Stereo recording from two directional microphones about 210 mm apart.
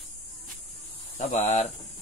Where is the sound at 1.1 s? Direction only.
35° left (ahead or behind).